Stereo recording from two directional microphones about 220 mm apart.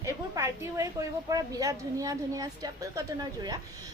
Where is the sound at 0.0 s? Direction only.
15° right (ahead or behind).